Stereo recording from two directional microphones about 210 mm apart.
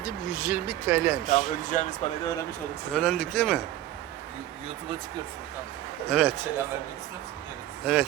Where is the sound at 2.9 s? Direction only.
5° left (ahead or behind).